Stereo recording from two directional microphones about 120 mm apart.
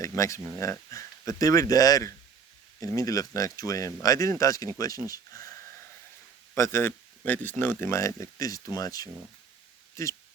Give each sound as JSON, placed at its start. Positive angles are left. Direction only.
{"t": 0.0, "sound": "speech", "side_deg": 25}